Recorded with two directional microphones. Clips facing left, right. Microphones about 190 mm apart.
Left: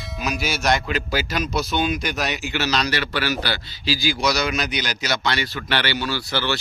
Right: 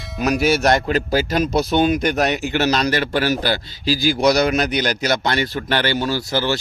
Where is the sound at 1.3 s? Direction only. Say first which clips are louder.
Right 7 dB; 30° right (ahead or behind).